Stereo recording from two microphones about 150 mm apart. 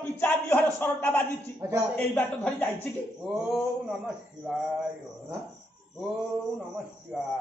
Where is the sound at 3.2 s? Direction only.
5° right (ahead or behind).